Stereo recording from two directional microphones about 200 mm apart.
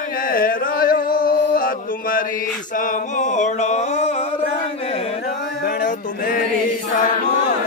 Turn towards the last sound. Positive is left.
turn(degrees=45)  # may be behind; listen again after turning